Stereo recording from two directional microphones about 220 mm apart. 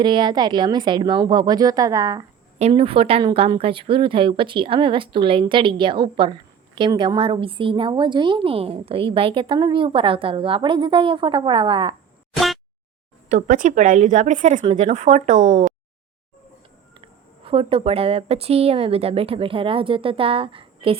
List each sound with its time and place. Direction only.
0.0 s a woman's voice: 20° right (ahead or behind)
2.6 s a woman's voice: 25° right (ahead or behind)
13.2 s speech: 35° right (ahead or behind)
17.0 s a woman's voice: 25° right (ahead or behind)